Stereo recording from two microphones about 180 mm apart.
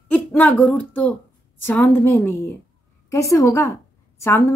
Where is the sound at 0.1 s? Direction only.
10° left (ahead or behind).